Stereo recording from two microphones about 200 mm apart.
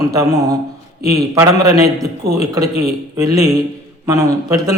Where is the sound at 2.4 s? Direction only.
15° right (ahead or behind).